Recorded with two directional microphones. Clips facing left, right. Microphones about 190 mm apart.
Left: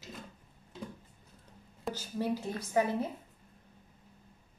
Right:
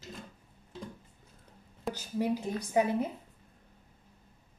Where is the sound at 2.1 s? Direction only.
15° right (ahead or behind).